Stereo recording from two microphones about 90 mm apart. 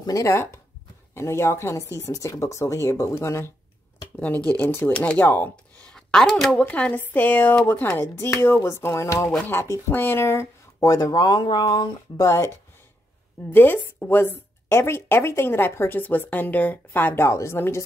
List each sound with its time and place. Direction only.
0.0 s speech: 40° left (ahead or behind)
4.2 s speech: 15° left (ahead or behind)
5.9 s a sound: 5° left (ahead or behind)
6.5 s speech: 15° left (ahead or behind); by 11.9 s 55° left (ahead or behind)
12.2 s speech: 30° left (ahead or behind)